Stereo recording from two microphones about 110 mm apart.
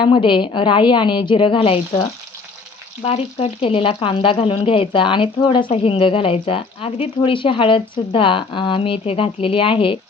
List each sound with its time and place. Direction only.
0.0 s speech: 50° left (ahead or behind)
5.7 s speech: 55° left (ahead or behind)